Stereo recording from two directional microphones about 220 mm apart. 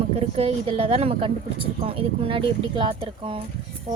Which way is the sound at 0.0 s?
25° right (ahead or behind).